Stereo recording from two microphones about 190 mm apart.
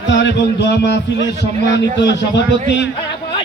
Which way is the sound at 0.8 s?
65° left (ahead or behind).